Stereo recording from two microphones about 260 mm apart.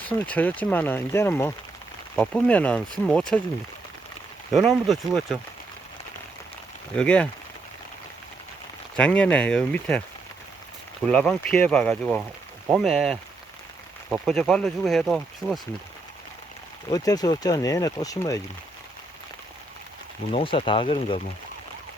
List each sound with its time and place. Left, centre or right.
0.0 s speech: centre
4.5 s speech: centre
6.9 s speech: centre
9.0 s speech: centre
11.0 s speech: centre
16.9 s speech: centre
20.3 s speech: left